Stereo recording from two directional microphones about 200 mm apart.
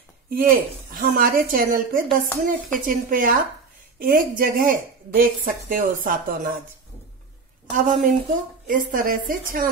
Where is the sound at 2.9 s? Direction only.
45° right (ahead or behind).